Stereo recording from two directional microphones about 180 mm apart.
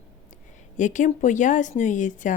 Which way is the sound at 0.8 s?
45° left (ahead or behind).